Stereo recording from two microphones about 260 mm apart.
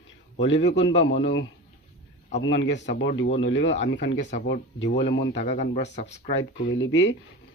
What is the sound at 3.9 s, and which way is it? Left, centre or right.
Speech, left.